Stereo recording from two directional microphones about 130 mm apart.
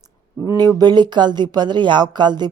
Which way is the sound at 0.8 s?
35° right (ahead or behind).